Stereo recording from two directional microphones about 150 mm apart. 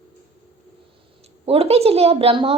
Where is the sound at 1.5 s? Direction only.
40° right (ahead or behind).